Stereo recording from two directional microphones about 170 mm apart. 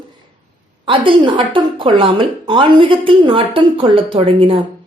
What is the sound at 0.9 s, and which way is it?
A woman's voice, 30° right (ahead or behind).